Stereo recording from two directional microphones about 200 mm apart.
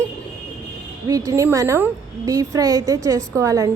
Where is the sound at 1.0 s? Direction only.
15° right (ahead or behind).